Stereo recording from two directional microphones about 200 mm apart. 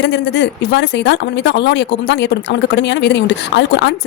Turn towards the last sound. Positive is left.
turn(degrees=60)  # may be behind; listen again after turning